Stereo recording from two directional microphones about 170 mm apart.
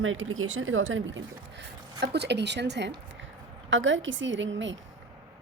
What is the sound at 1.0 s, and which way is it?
Speech, 90° right.